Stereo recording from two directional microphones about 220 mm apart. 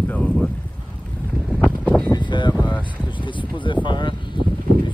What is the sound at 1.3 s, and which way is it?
Wind, centre (ahead or behind).